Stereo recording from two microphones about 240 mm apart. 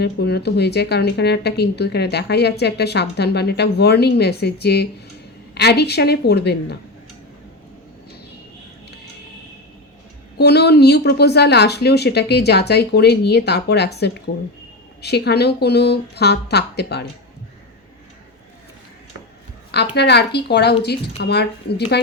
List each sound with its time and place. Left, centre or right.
0.0 s a woman's voice: left
10.3 s a woman's voice: left
19.7 s a woman's voice: left